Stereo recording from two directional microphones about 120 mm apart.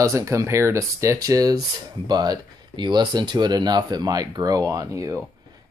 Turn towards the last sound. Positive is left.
turn(degrees=-30)  # may be behind; listen again after turning